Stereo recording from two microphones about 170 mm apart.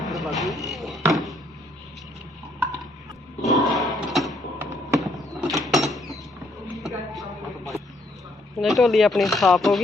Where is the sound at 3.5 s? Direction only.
Centre (ahead or behind).